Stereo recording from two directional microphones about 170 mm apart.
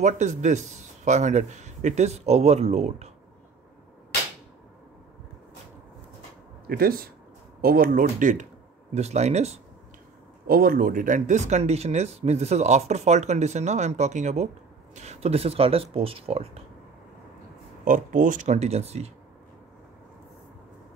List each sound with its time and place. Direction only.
0.0 s speech: 45° right (ahead or behind)
6.7 s speech: 60° right (ahead or behind); by 9.5 s 40° right (ahead or behind)
10.4 s speech: 60° right (ahead or behind); by 16.6 s 35° right (ahead or behind)
17.8 s speech: 50° right (ahead or behind)